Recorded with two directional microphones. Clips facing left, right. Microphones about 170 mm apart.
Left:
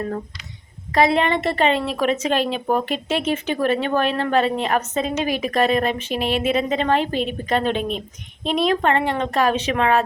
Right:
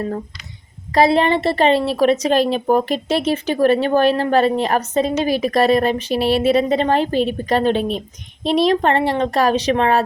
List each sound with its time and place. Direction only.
0.9 s a woman's voice: 35° right (ahead or behind)